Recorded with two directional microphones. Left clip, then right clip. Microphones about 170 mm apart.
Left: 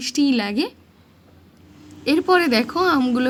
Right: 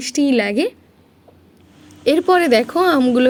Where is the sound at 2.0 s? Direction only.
20° right (ahead or behind).